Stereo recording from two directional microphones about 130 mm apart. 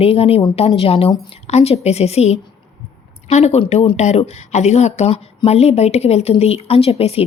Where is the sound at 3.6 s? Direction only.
50° left (ahead or behind).